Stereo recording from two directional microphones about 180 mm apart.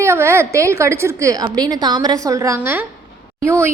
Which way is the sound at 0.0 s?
15° right (ahead or behind).